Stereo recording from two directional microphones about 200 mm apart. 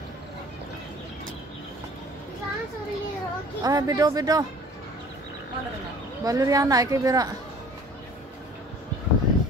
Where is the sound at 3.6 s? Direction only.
20° right (ahead or behind).